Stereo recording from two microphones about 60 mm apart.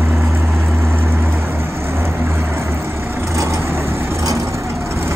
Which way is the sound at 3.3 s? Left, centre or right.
Right.